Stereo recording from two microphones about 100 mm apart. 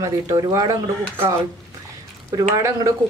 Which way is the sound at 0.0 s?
30° right (ahead or behind).